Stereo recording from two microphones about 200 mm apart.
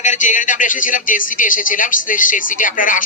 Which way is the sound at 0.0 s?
40° left (ahead or behind).